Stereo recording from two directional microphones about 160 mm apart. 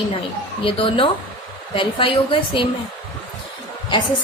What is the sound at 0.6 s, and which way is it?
A woman's voice, 35° left (ahead or behind).